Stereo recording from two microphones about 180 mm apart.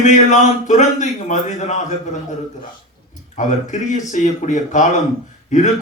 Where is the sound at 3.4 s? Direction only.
45° left (ahead or behind).